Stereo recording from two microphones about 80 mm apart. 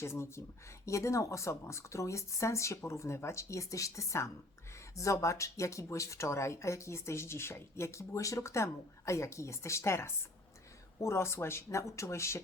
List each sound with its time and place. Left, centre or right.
0.0 s speech: left